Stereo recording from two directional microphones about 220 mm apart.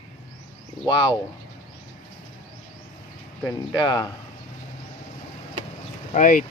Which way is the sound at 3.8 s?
20° left (ahead or behind).